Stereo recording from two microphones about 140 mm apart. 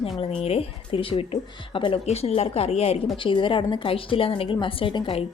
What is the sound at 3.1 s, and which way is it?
A woman's voice, 35° left (ahead or behind).